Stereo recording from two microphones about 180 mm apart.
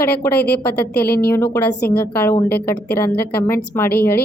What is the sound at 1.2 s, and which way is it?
A woman's voice, 15° left (ahead or behind).